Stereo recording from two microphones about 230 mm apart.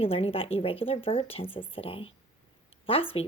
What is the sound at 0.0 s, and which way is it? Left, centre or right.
A woman's voice, left.